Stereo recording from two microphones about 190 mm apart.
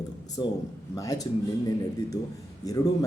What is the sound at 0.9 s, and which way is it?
A man's voice, 20° left (ahead or behind).